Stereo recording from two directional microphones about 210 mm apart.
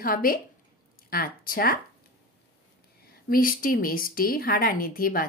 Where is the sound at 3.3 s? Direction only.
40° left (ahead or behind).